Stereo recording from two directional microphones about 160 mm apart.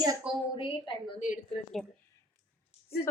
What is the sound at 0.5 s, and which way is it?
Speech, 30° left (ahead or behind).